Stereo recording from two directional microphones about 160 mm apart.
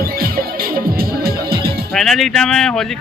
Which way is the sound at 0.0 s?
65° right (ahead or behind).